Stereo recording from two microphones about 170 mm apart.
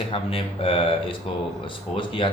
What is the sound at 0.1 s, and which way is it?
Speech, 30° left (ahead or behind).